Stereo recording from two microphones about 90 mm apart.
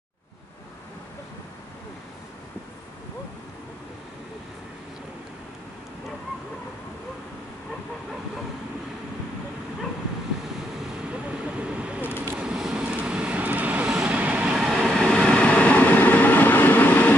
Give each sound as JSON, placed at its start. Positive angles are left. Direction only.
{"t": 11.1, "sound": "vehicle", "side_deg": -15}
{"t": 14.6, "sound": "train", "side_deg": 0}